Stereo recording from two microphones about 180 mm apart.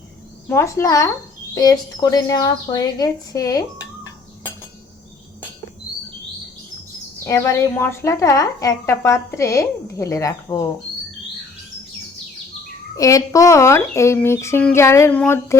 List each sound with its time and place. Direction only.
0.4 s a woman's voice: 15° left (ahead or behind)
7.3 s a woman's voice: 15° left (ahead or behind)
13.0 s a woman's voice: 20° left (ahead or behind)